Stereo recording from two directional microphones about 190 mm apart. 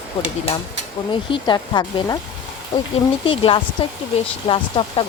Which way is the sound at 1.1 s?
25° left (ahead or behind).